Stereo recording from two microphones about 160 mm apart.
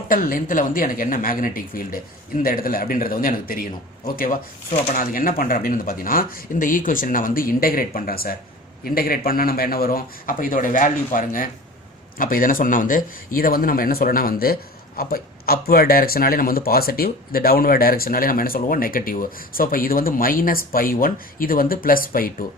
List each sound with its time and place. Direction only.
0.1 s a man's voice: 60° left (ahead or behind)